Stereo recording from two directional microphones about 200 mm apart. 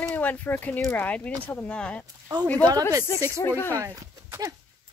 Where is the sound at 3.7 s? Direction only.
15° right (ahead or behind).